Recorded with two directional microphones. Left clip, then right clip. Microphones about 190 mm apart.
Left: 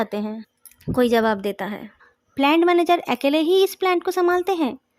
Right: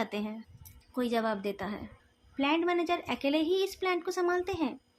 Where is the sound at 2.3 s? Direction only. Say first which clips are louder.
Left 12 dB; 60° left (ahead or behind).